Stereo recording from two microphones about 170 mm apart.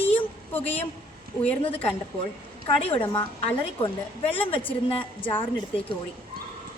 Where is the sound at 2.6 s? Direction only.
35° left (ahead or behind).